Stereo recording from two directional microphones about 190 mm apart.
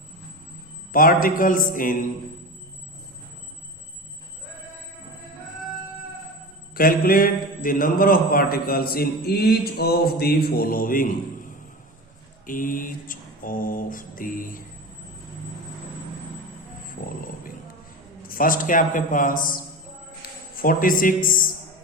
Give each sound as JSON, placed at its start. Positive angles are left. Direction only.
{"t": 0.9, "sound": "a man's voice", "side_deg": 50}
{"t": 6.7, "sound": "a man's voice", "side_deg": 50}
{"t": 12.5, "sound": "a man's voice", "side_deg": 45}
{"t": 17.0, "sound": "speech", "side_deg": 60}
{"t": 18.2, "sound": "a man's voice", "side_deg": 50}